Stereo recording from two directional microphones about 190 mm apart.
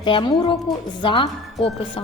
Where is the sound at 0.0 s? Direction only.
25° left (ahead or behind).